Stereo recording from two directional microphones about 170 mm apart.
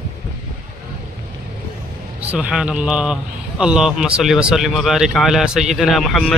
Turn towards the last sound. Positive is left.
turn(degrees=0)  # may be behind; listen again after turning